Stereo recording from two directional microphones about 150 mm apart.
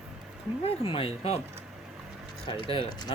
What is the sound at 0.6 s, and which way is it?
Speech, 40° left (ahead or behind).